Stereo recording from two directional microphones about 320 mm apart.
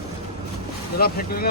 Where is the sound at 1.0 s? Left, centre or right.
Left.